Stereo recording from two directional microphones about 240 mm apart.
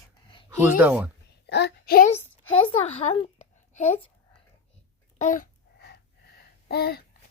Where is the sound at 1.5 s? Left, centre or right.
Left.